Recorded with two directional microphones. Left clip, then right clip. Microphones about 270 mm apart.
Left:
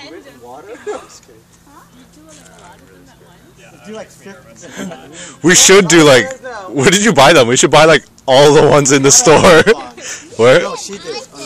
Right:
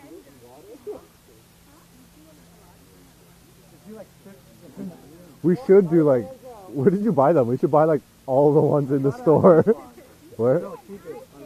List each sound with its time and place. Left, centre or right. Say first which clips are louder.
5.4 s speech: left 10 dB; left